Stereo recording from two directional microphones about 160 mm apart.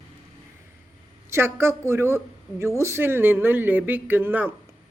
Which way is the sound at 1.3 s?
15° right (ahead or behind).